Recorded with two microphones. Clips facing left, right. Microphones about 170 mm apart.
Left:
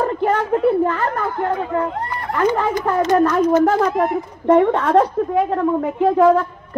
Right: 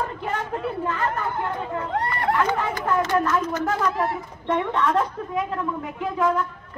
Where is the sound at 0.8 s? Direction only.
50° left (ahead or behind).